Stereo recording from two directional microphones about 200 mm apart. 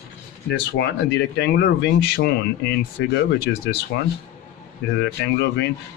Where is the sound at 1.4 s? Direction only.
55° left (ahead or behind).